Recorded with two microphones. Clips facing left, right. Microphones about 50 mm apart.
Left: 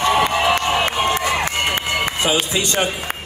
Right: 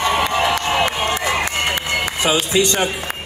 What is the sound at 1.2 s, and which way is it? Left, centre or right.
Run, left.